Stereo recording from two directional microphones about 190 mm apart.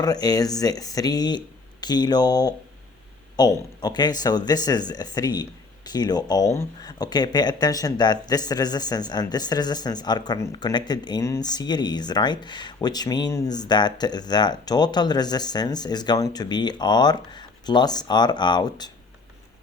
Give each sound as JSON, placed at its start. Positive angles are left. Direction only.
{"t": 0.0, "sound": "speech", "side_deg": 20}